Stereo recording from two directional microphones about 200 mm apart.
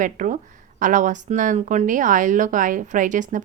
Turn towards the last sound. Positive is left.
turn(degrees=-40)  # may be behind; listen again after turning